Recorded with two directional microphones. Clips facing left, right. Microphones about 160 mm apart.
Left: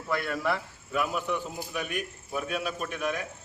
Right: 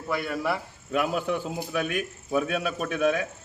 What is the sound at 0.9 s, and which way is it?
A man's voice, 85° right.